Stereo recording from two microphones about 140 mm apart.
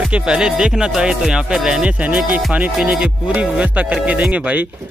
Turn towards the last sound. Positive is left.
turn(degrees=-10)  # may be behind; listen again after turning